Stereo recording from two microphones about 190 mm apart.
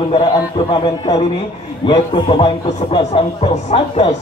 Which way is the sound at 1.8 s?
25° left (ahead or behind).